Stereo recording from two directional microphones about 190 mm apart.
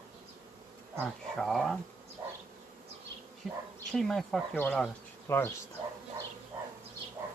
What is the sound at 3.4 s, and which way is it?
Bee, centre (ahead or behind).